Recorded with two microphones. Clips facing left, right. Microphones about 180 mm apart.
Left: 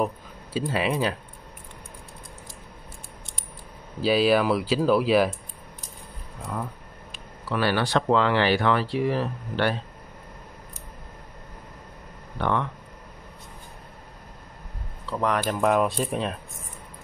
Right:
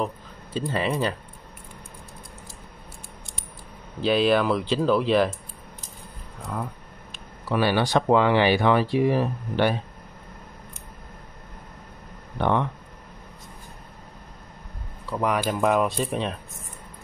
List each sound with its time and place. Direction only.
0.0 s speech: 5° left (ahead or behind)
4.0 s speech: 5° left (ahead or behind)
6.4 s speech: centre (ahead or behind)
7.4 s speech: 15° right (ahead or behind)
12.4 s speech: 15° right (ahead or behind)
15.0 s speech: 10° right (ahead or behind)